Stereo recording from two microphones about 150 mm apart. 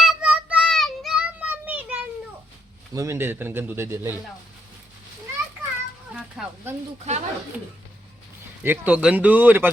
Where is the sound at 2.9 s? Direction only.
20° right (ahead or behind).